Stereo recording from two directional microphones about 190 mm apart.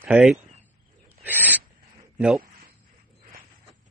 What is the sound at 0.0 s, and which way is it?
Speech, 5° right (ahead or behind).